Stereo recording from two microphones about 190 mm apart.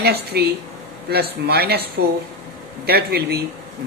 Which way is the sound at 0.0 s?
60° right (ahead or behind).